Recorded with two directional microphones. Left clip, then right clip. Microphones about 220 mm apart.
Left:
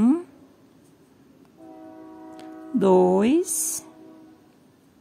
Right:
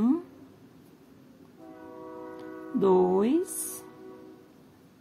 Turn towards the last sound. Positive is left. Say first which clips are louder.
# left 5 dB
turn(degrees=30)  # may be behind; listen again after turning